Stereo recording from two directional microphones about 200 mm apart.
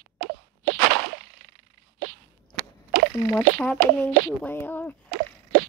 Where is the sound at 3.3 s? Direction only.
5° left (ahead or behind).